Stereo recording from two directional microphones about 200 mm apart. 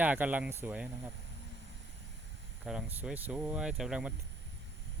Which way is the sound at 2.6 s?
5° right (ahead or behind).